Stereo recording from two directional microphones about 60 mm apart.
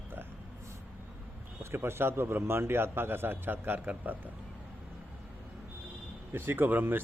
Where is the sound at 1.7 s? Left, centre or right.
Right.